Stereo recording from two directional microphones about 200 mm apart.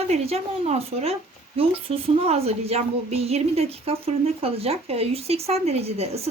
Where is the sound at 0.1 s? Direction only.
30° right (ahead or behind).